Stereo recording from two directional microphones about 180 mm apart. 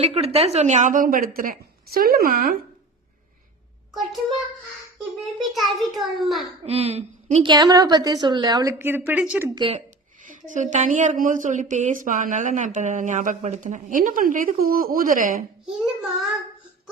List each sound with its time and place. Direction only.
0.0 s a woman's voice: 35° right (ahead or behind); by 2.6 s 50° right (ahead or behind)
3.9 s a child's voice: centre (ahead or behind)
6.7 s a woman's voice: 35° right (ahead or behind)
7.4 s a woman's voice: 25° right (ahead or behind); by 9.5 s 10° right (ahead or behind)
9.6 s speech: 30° right (ahead or behind)
10.2 s a woman's voice: 45° right (ahead or behind)